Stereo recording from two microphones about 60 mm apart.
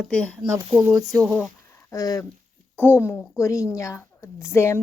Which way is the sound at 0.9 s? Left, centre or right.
Right.